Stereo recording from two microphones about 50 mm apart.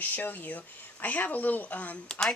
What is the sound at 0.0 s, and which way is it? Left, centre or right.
Speech, left.